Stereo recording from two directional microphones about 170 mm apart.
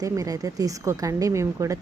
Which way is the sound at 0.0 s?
20° right (ahead or behind).